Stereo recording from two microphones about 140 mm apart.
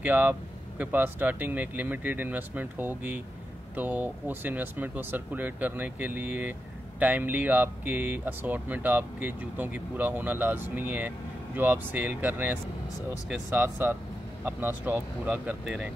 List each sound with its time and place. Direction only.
0.0 s speech: 10° right (ahead or behind)